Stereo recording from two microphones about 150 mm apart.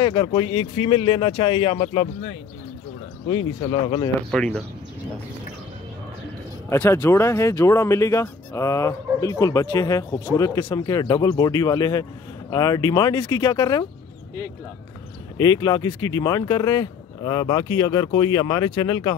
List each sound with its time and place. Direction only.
0.0 s speech: 30° left (ahead or behind)
4.3 s speech: 5° left (ahead or behind)
6.7 s speech: 15° left (ahead or behind)
15.3 s speech: 30° left (ahead or behind)